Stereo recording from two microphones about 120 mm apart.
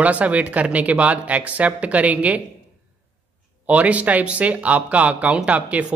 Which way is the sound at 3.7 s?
10° right (ahead or behind).